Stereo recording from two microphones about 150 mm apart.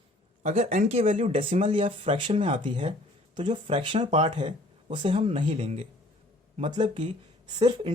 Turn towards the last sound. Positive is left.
turn(degrees=-30)  # may be behind; listen again after turning